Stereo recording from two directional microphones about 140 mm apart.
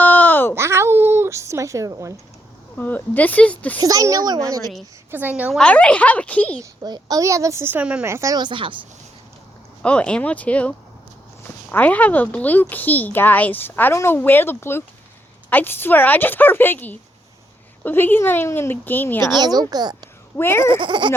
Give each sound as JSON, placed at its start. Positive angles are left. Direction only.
{"t": 0.0, "sound": "a sound", "side_deg": 15}
{"t": 0.5, "sound": "a sound", "side_deg": -20}
{"t": 2.7, "sound": "speech", "side_deg": 10}
{"t": 3.8, "sound": "a woman's voice", "side_deg": -25}
{"t": 5.1, "sound": "a woman's voice", "side_deg": -10}
{"t": 5.5, "sound": "speech", "side_deg": 10}
{"t": 6.6, "sound": "a woman's voice", "side_deg": -30}
{"t": 9.8, "sound": "speech", "side_deg": 10}
{"t": 19.4, "sound": "a woman's voice", "side_deg": -30}
{"t": 20.3, "sound": "speech", "side_deg": 15}
{"t": 20.7, "sound": "speech", "side_deg": -35}